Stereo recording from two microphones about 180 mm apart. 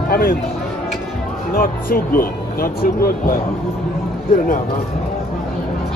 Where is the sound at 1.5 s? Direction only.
55° left (ahead or behind).